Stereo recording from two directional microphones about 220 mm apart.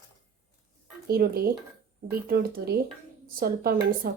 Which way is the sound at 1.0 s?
45° right (ahead or behind).